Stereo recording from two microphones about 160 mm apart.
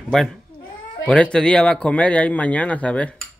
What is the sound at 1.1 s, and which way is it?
Speech, 5° left (ahead or behind).